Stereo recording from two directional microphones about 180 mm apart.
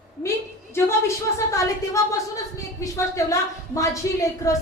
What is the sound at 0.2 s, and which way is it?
Speech, 15° left (ahead or behind).